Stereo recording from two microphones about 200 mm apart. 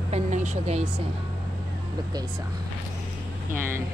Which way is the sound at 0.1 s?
35° right (ahead or behind).